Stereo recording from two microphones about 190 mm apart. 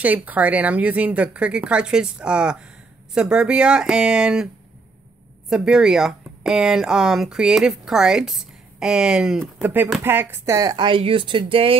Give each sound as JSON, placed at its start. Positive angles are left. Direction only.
{"t": 0.0, "sound": "speech", "side_deg": -10}
{"t": 5.5, "sound": "speech", "side_deg": -5}